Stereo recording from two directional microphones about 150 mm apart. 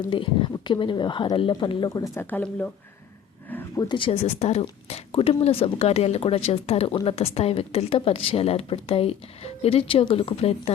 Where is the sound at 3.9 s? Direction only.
35° left (ahead or behind).